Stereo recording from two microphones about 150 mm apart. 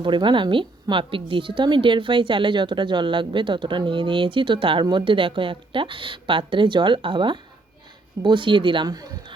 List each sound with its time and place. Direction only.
0.0 s speech: 35° right (ahead or behind)